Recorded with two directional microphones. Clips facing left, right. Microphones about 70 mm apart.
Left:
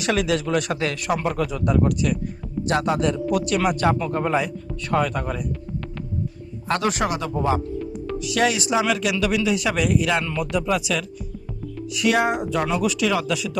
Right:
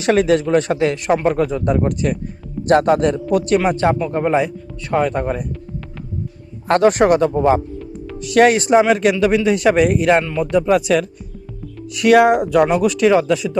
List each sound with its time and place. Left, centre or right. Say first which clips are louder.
0.0 s speech: right 7 dB; right
6.7 s speech: right 10 dB; right